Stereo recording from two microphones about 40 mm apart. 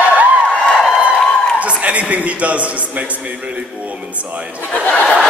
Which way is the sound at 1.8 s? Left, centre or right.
Right.